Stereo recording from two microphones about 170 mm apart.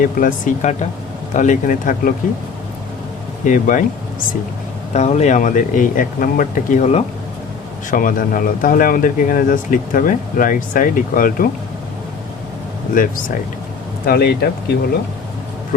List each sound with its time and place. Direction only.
0.0 s speech: 55° left (ahead or behind)
3.4 s speech: 50° left (ahead or behind)
4.9 s speech: 40° left (ahead or behind)
12.9 s speech: 55° left (ahead or behind)
14.0 s speech: 65° left (ahead or behind)